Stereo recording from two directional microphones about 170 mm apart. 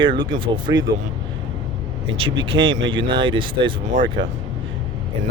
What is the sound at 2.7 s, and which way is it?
Speech, 90° right.